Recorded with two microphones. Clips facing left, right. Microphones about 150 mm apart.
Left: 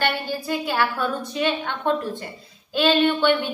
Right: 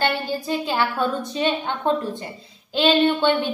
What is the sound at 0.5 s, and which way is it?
A woman's voice, 25° right (ahead or behind).